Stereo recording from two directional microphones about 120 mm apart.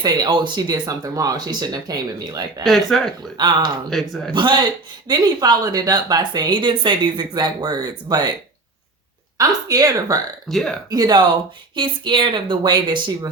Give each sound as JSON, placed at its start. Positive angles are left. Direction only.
{"t": 0.0, "sound": "speech", "side_deg": -35}
{"t": 2.6, "sound": "speech", "side_deg": 0}
{"t": 3.3, "sound": "speech", "side_deg": -35}
{"t": 9.4, "sound": "speech", "side_deg": -30}
{"t": 10.5, "sound": "speech", "side_deg": 0}
{"t": 10.8, "sound": "speech", "side_deg": -35}